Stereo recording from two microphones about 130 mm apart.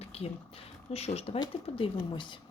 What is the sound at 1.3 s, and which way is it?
Speech, 35° left (ahead or behind).